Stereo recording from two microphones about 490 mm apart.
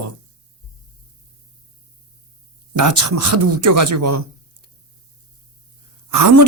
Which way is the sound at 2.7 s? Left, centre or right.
Right.